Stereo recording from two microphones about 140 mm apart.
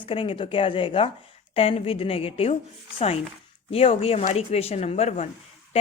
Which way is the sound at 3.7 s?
45° left (ahead or behind).